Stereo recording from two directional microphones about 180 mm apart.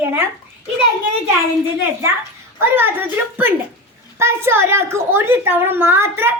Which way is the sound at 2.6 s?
10° right (ahead or behind).